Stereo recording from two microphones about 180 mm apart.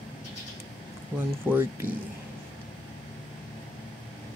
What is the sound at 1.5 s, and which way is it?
Speech, 10° right (ahead or behind).